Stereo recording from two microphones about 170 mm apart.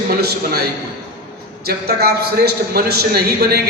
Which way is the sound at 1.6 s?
65° right (ahead or behind).